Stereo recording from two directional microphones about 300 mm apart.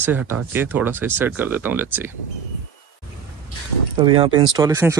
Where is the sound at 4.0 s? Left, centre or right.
Centre.